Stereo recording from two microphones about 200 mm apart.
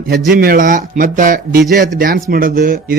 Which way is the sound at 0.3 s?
45° right (ahead or behind).